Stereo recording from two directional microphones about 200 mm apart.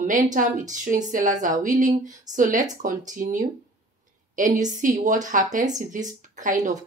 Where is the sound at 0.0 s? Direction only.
40° right (ahead or behind).